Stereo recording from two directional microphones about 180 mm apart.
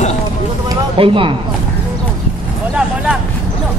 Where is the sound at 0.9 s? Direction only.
30° right (ahead or behind).